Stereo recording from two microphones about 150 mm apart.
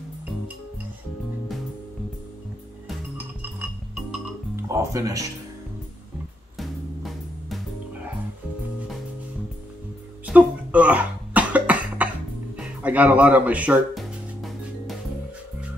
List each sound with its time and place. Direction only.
3.5 s music: 5° right (ahead or behind)
4.6 s speech: 20° right (ahead or behind)
6.6 s music: centre (ahead or behind)
10.2 s cough: 10° right (ahead or behind)
12.5 s music: 10° right (ahead or behind)